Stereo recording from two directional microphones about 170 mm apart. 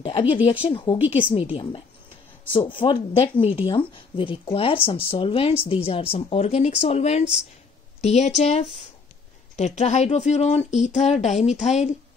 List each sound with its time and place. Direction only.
0.0 s speech: 30° left (ahead or behind)
2.8 s speech: 30° left (ahead or behind)